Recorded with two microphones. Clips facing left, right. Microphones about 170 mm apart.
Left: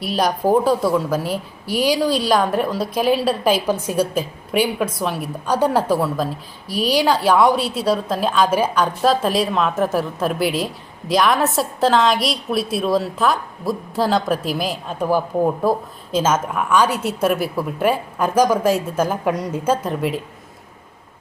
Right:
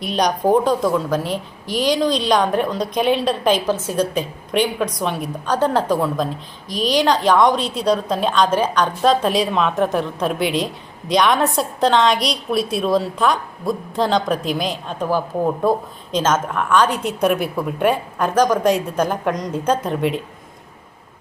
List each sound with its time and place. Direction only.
0.0 s a woman's voice: 5° left (ahead or behind)